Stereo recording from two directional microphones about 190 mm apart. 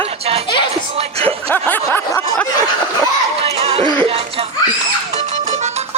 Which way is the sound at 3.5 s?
30° right (ahead or behind).